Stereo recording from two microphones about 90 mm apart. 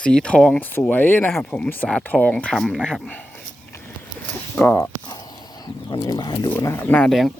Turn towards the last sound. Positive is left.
turn(degrees=0)  # may be behind; listen again after turning